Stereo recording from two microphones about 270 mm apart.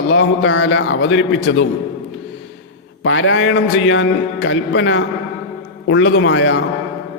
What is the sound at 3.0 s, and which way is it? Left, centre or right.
A man's voice, left.